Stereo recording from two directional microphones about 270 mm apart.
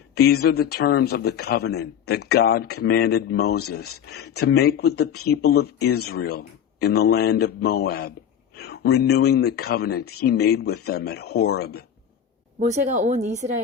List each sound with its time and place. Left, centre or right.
0.1 s speech: left
12.5 s speech: right